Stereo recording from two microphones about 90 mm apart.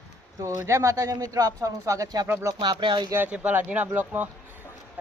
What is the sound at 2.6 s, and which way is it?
Speech, 55° right (ahead or behind).